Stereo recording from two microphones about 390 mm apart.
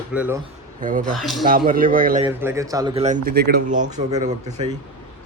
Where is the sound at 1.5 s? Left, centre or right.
Right.